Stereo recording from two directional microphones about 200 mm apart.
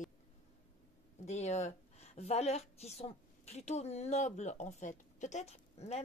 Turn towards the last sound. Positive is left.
turn(degrees=35)  # may be behind; listen again after turning